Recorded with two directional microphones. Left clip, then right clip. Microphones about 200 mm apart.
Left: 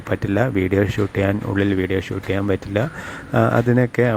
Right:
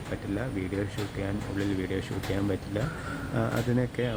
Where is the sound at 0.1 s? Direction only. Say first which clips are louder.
Left 14 dB; 45° left (ahead or behind).